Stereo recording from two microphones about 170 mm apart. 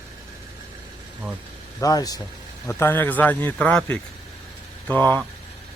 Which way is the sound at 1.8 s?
20° left (ahead or behind).